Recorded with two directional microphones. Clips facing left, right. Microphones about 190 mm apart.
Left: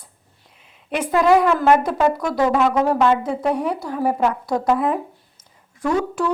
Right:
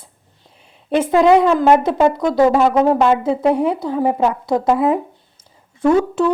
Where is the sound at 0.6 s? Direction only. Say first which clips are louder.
Right 7 dB; 30° right (ahead or behind).